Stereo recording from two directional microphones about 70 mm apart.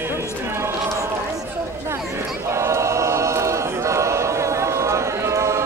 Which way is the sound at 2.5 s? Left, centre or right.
Right.